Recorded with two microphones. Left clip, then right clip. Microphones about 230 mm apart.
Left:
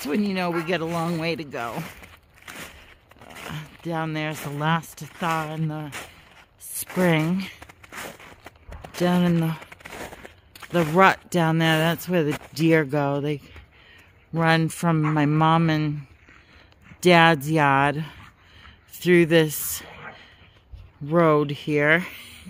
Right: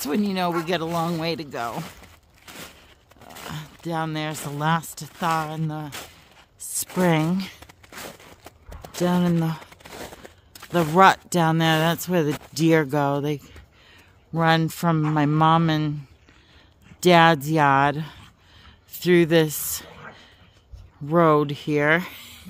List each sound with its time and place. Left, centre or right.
0.0 s speech: centre
2.0 s a sound: centre
3.2 s speech: centre
7.6 s walk: centre
9.6 s a sound: centre
10.6 s speech: centre
17.0 s speech: centre
19.9 s a sound: right
21.1 s speech: centre